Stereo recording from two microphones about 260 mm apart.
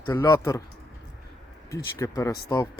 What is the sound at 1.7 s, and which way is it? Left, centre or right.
Speech, centre.